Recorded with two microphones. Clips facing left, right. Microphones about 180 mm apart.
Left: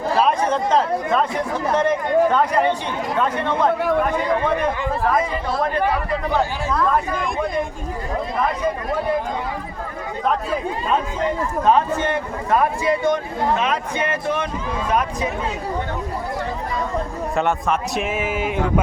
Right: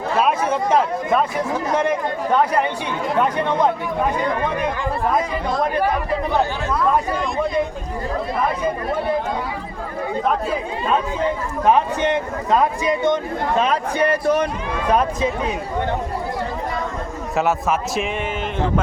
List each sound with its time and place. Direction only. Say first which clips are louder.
0.2 s chatter: even; 10° right (ahead or behind)
1.7 s speech: left 4 dB; 10° right (ahead or behind)
5.1 s speech: even; centre (ahead or behind)
11.6 s a man's voice: right 1 dB; 15° right (ahead or behind)
13.6 s speech: right 4 dB; 35° right (ahead or behind)
17.3 s speech: right 1 dB; 5° right (ahead or behind)